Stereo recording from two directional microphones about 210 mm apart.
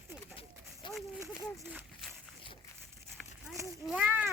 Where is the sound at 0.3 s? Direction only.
25° left (ahead or behind).